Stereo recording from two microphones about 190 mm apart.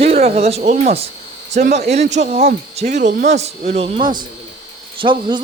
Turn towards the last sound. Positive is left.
turn(degrees=-25)  # may be behind; listen again after turning